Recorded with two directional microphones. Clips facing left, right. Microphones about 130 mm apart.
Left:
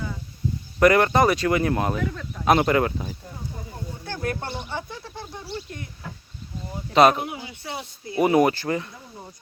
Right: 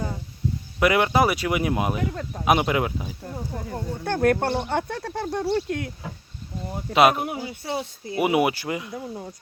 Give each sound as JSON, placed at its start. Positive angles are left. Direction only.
{"t": 0.8, "sound": "speech", "side_deg": -5}
{"t": 3.7, "sound": "speech", "side_deg": -55}
{"t": 6.9, "sound": "speech", "side_deg": -10}
{"t": 7.2, "sound": "speech", "side_deg": -40}
{"t": 8.2, "sound": "speech", "side_deg": -10}